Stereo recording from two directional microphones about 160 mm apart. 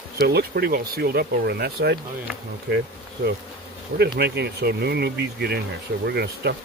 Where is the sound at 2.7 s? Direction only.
85° right.